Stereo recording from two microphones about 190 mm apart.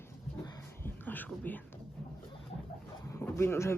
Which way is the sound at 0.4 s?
15° left (ahead or behind).